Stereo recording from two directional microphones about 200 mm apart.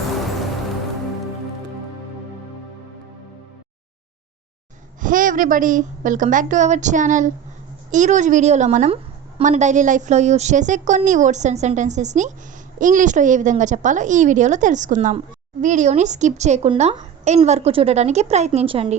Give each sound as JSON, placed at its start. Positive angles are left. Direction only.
{"t": 4.9, "sound": "a woman's voice", "side_deg": -40}